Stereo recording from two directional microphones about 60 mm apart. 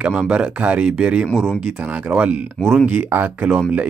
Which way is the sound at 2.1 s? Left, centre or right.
Right.